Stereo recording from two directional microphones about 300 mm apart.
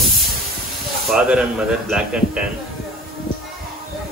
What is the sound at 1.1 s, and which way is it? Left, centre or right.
Speech, centre.